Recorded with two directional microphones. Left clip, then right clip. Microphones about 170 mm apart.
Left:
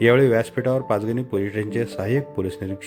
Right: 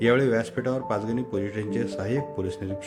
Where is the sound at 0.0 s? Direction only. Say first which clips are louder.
Left 5 dB; 20° left (ahead or behind).